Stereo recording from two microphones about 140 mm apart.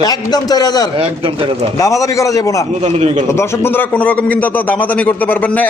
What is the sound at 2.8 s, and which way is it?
Speech, 55° right (ahead or behind).